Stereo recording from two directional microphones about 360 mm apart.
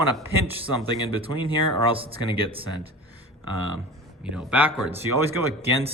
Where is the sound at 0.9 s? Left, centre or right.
Centre.